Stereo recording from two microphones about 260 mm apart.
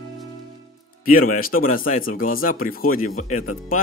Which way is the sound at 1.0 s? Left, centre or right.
Left.